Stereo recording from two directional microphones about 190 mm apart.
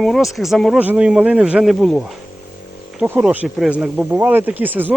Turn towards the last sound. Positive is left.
turn(degrees=-10)  # may be behind; listen again after turning